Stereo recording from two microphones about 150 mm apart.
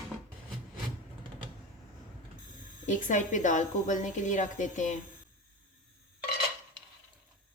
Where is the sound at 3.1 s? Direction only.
55° left (ahead or behind).